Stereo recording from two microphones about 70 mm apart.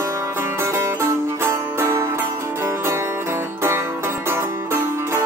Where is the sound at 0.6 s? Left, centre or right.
Right.